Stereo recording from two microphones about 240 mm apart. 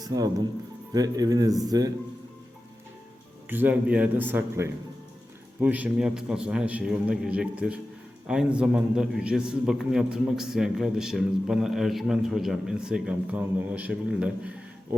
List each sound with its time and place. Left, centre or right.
0.0 s a man's voice: centre
3.5 s a man's voice: centre